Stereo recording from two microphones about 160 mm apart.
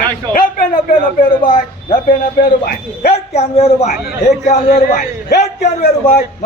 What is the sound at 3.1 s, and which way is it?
A man's voice, 40° left (ahead or behind).